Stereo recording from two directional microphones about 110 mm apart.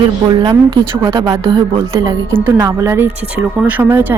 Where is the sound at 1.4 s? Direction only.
40° right (ahead or behind).